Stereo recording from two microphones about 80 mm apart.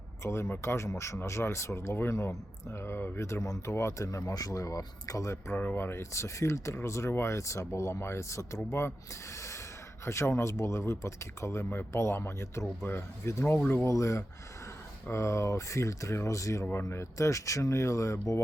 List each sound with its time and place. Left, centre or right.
0.2 s speech: left
5.5 s speech: left
10.1 s speech: left